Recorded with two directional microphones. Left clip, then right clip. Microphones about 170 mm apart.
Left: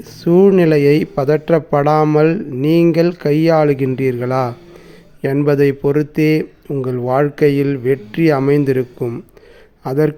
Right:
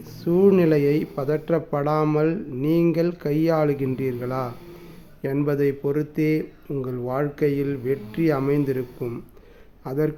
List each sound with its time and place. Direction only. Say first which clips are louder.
0.0 s a man's voice: left 7 dB; 35° left (ahead or behind)